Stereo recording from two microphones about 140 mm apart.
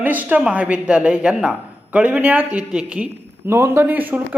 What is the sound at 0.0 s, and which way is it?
A man's voice, 10° right (ahead or behind).